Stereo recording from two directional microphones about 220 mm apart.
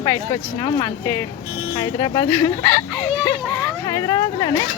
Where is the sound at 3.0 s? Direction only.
10° left (ahead or behind).